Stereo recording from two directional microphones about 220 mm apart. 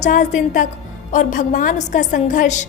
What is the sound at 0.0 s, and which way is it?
A woman's voice, 35° left (ahead or behind).